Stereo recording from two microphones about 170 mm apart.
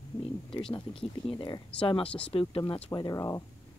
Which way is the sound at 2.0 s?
5° left (ahead or behind).